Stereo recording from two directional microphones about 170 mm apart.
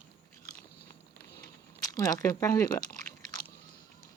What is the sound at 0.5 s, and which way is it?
Biting, 70° left (ahead or behind).